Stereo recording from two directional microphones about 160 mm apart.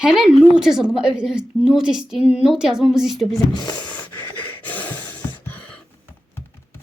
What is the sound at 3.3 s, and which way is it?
Speech, 25° left (ahead or behind).